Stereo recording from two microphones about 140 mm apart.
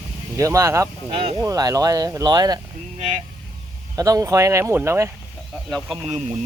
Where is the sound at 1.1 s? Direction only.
40° right (ahead or behind).